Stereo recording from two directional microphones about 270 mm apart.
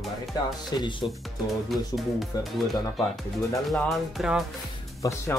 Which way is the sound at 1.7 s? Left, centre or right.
Centre.